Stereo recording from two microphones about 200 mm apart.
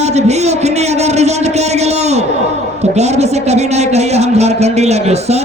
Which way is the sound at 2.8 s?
35° right (ahead or behind).